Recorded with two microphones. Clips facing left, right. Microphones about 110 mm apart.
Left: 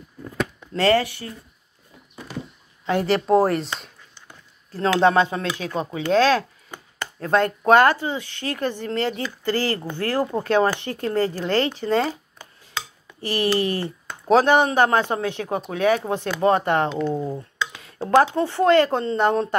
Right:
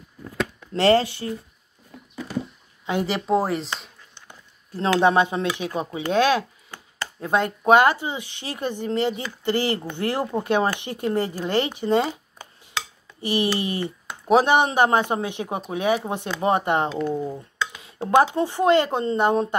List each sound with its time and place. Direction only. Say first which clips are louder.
0.7 s speech: right 1 dB; 25° right (ahead or behind)
2.9 s speech: left 3 dB; 5° right (ahead or behind)
4.7 s speech: left 1 dB; 15° right (ahead or behind)
13.2 s speech: left 2 dB; 20° right (ahead or behind)
17.1 s speech: left 1 dB; centre (ahead or behind)
17.7 s speech: left 1 dB; 15° right (ahead or behind)